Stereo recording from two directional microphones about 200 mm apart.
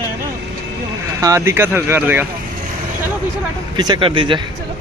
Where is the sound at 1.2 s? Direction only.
15° right (ahead or behind).